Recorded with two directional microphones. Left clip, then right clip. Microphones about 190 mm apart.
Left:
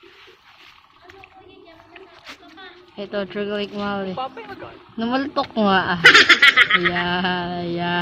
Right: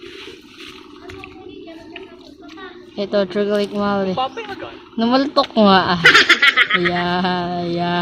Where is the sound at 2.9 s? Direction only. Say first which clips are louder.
Right 8 dB; 10° right (ahead or behind).